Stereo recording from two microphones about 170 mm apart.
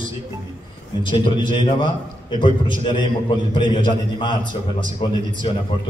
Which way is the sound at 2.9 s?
30° left (ahead or behind).